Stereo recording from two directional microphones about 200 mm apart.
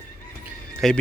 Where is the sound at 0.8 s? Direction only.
Centre (ahead or behind).